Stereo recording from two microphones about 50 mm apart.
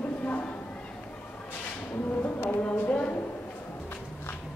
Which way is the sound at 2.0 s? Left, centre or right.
Left.